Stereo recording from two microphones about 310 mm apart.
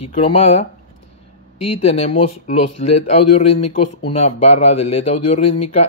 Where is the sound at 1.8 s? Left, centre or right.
Centre.